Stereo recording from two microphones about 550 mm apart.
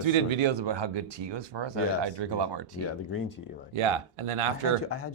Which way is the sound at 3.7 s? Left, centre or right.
Right.